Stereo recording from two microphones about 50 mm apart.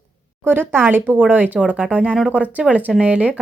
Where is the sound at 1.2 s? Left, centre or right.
Right.